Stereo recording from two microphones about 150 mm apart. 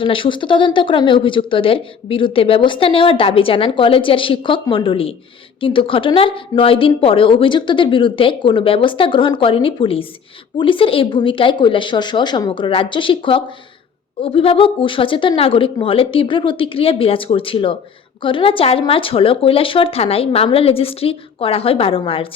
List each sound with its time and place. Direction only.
0.0 s speech: 35° left (ahead or behind)